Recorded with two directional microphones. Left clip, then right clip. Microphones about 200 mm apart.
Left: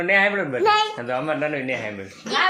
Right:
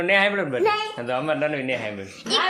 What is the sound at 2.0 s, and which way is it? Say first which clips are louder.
Speech: right 2 dB; 55° right (ahead or behind).